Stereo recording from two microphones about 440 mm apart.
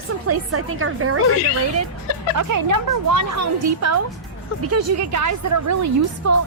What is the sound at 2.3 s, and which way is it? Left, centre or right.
A woman's voice, right.